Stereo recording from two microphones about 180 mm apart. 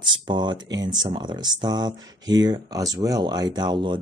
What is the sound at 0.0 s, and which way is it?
Speech, 25° right (ahead or behind).